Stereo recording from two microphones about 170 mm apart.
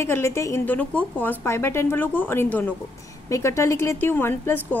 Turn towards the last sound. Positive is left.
turn(degrees=15)  # may be behind; listen again after turning